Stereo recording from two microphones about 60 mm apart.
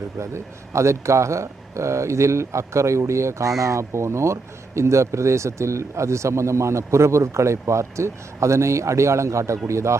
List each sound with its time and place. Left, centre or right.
0.2 s speech: right